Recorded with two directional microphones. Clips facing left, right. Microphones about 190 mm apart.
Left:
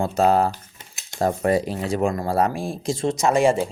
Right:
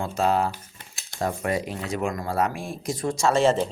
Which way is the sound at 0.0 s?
40° left (ahead or behind).